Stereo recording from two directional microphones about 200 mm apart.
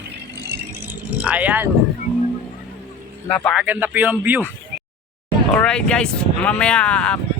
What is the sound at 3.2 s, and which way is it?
Speech, 5° left (ahead or behind).